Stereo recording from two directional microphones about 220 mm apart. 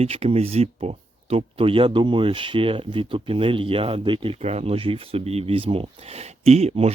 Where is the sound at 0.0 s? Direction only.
30° right (ahead or behind).